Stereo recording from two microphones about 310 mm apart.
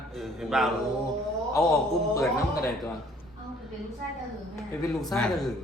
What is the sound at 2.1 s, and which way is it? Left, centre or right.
Speech, centre.